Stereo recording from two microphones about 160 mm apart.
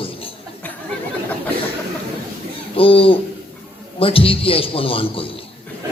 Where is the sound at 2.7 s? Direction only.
35° left (ahead or behind).